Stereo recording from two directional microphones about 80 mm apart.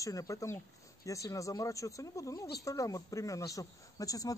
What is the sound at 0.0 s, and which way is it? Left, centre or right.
Speech, left.